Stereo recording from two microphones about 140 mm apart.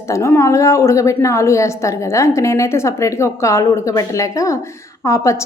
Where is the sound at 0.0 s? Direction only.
20° left (ahead or behind).